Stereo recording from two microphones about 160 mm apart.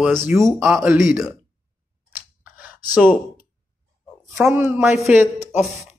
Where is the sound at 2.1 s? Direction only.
10° right (ahead or behind).